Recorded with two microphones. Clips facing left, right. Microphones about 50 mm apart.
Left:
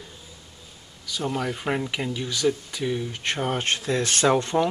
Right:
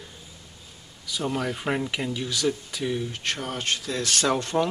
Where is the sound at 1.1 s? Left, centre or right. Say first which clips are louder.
Even; centre.